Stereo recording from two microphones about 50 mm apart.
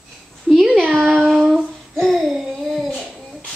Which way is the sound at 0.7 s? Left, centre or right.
Centre.